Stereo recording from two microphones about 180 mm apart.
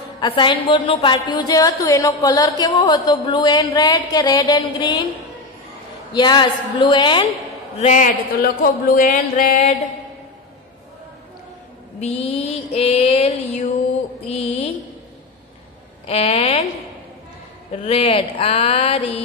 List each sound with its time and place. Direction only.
0.2 s speech: 25° left (ahead or behind)
6.1 s speech: 25° left (ahead or behind)
7.7 s speech: 45° left (ahead or behind)
12.0 s mantra: 35° left (ahead or behind)
16.1 s mantra: 35° left (ahead or behind)
17.8 s mantra: 30° left (ahead or behind)